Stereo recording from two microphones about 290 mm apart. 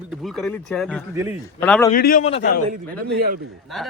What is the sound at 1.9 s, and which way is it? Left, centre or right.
Speech, left.